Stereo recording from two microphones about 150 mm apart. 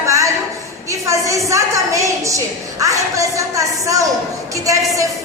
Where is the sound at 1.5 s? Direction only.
20° right (ahead or behind).